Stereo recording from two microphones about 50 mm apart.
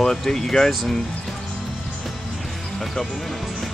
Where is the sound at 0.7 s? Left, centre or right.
Centre.